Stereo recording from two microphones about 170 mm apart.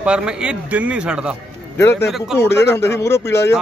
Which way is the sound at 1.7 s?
15° left (ahead or behind).